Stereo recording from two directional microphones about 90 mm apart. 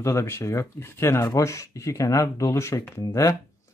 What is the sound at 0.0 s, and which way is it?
Speech, 30° left (ahead or behind).